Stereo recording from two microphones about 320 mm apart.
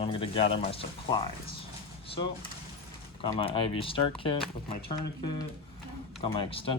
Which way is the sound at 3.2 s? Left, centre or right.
Centre.